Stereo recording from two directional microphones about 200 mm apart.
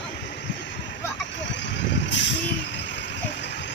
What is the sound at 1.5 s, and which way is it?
Vehicle, 65° left (ahead or behind).